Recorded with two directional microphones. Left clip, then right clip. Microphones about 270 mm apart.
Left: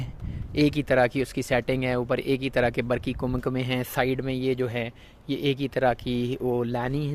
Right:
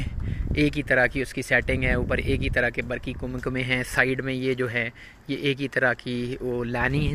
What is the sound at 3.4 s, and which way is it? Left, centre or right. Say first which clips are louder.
Speech: right 7 dB; centre.